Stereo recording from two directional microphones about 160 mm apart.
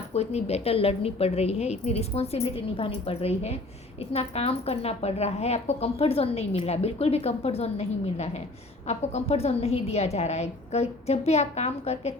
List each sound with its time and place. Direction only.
0.1 s a woman's voice: 40° left (ahead or behind)